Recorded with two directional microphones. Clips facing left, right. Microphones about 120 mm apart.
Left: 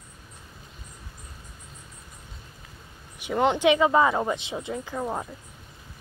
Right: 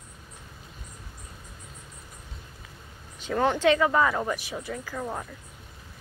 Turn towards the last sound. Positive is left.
turn(degrees=20)  # may be behind; listen again after turning